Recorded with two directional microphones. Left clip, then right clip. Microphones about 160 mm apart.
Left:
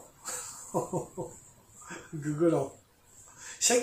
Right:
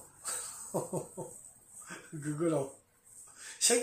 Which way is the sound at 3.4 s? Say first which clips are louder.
Left 3 dB; 20° right (ahead or behind).